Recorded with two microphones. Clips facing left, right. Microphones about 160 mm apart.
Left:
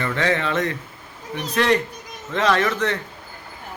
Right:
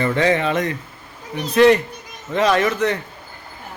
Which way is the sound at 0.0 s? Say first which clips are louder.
Right 4 dB; 15° right (ahead or behind).